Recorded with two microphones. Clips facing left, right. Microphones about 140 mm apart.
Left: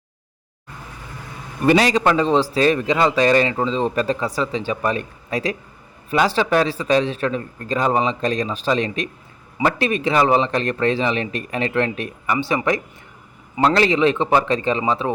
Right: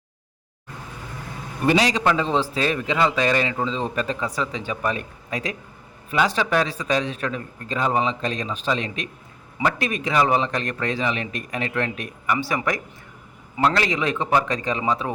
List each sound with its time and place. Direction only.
1.6 s a man's voice: 55° left (ahead or behind); by 15.1 s 30° left (ahead or behind)